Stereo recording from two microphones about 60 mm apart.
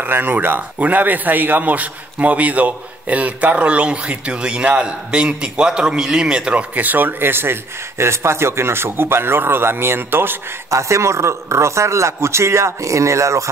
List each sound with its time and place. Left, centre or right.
0.0 s speech: right; by 6.6 s centre
6.7 s speech: right
8.0 s speech: right
10.7 s a man's voice: right